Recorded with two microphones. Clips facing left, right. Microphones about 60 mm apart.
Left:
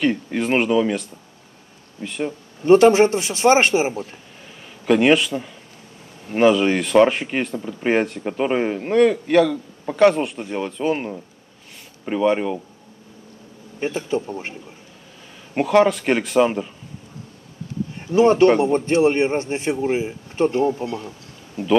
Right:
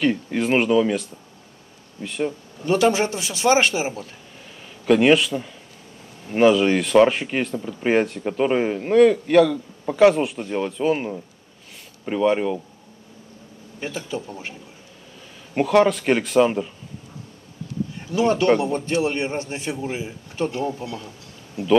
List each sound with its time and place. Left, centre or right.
0.0 s speech: centre
2.6 s a man's voice: left
4.8 s speech: centre
13.7 s a man's voice: left
15.5 s speech: centre
18.0 s a man's voice: left